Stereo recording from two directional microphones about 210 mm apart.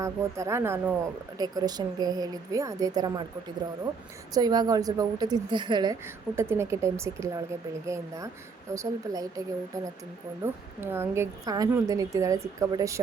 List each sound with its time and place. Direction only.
0.0 s a woman's voice: 15° right (ahead or behind)
4.4 s a woman's voice: 20° right (ahead or behind)
10.4 s a woman's voice: 10° right (ahead or behind)